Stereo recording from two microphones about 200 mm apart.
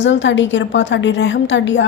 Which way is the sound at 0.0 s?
65° left (ahead or behind).